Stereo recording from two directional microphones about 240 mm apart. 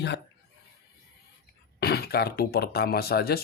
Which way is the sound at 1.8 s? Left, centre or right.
Left.